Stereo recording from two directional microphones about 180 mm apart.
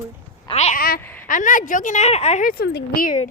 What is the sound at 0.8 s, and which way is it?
A woman's voice, 55° left (ahead or behind).